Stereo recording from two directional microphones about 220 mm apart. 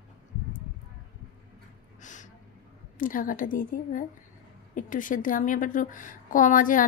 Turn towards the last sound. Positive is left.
turn(degrees=40)  # may be behind; listen again after turning